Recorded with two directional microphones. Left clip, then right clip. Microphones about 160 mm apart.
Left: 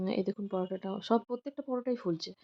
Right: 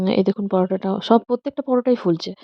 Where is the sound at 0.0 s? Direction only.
60° right (ahead or behind).